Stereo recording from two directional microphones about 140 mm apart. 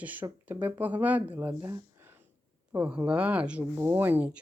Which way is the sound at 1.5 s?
20° right (ahead or behind).